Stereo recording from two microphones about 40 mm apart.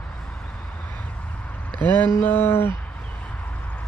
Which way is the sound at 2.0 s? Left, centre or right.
Left.